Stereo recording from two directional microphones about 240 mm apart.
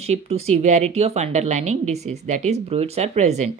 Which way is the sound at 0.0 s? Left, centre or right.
Right.